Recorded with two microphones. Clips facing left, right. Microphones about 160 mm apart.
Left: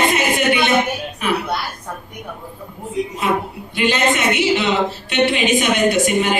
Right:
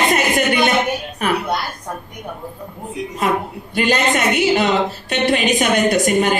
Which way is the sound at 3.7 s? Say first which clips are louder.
Right 1 dB; 45° right (ahead or behind).